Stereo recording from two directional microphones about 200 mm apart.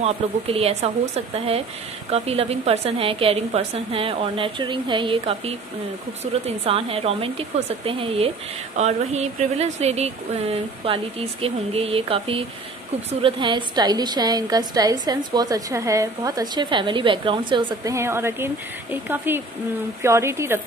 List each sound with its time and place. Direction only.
0.0 s a woman's voice: 30° right (ahead or behind); by 20.6 s 10° right (ahead or behind)